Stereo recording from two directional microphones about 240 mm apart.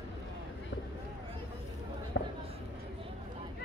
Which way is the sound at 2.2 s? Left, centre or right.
Left.